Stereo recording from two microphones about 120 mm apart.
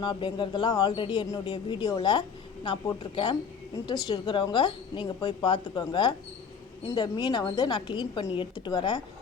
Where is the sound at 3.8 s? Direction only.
35° left (ahead or behind).